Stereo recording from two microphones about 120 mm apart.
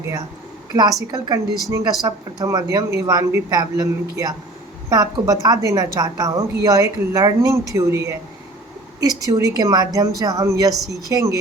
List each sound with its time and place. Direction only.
0.7 s a woman's voice: 35° right (ahead or behind)